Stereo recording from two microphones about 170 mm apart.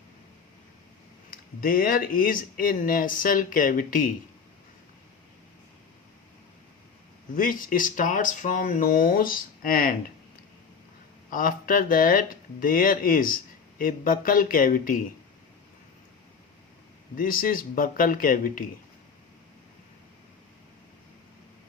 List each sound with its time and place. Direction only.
1.3 s speech: 55° left (ahead or behind)
7.3 s speech: 55° left (ahead or behind)
11.3 s speech: 55° left (ahead or behind)
17.2 s speech: 55° left (ahead or behind)